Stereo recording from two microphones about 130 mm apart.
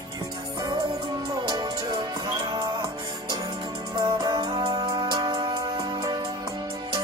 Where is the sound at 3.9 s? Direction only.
35° right (ahead or behind).